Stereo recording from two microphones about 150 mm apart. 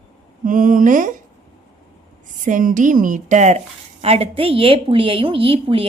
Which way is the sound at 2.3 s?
60° right (ahead or behind).